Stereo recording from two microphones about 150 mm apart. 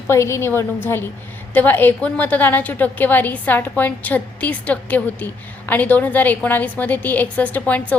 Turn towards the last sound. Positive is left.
turn(degrees=10)  # may be behind; listen again after turning